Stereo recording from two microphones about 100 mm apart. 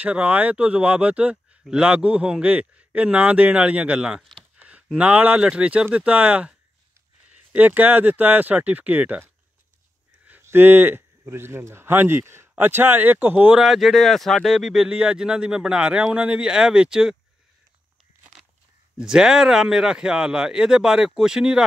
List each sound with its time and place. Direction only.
0.0 s speech: 15° right (ahead or behind)
4.2 s a sound: 5° left (ahead or behind)
4.6 s a sound: 15° right (ahead or behind)
4.9 s speech: 15° right (ahead or behind)
7.5 s speech: 15° right (ahead or behind)
13.6 s speech: centre (ahead or behind)
18.9 s speech: 5° right (ahead or behind)